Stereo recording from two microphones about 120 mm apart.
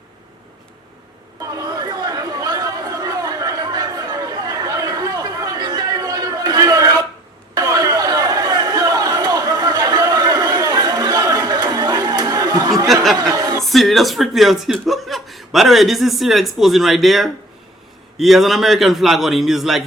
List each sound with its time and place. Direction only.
1.4 s chatter: 30° right (ahead or behind)
12.9 s a sound: centre (ahead or behind)
13.1 s chuckle: 30° right (ahead or behind)
13.7 s a man's voice: centre (ahead or behind)